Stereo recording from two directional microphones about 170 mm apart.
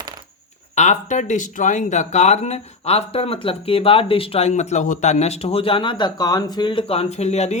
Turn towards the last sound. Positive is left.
turn(degrees=40)  # may be behind; listen again after turning